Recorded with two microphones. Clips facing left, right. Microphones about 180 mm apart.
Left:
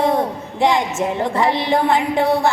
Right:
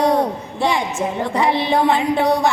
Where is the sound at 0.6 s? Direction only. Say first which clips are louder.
Left 3 dB; 20° left (ahead or behind).